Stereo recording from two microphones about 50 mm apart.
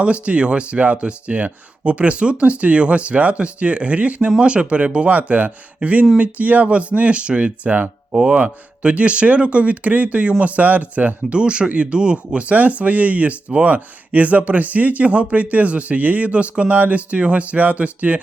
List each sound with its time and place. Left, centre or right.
0.0 s speech: right